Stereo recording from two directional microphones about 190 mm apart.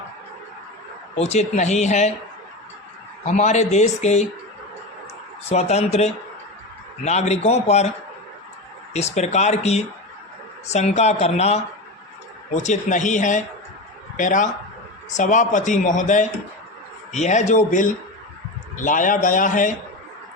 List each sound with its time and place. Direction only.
1.1 s a man's voice: 35° left (ahead or behind)
3.2 s a man's voice: 40° left (ahead or behind)
5.5 s a man's voice: 35° left (ahead or behind)
8.9 s a man's voice: 35° left (ahead or behind)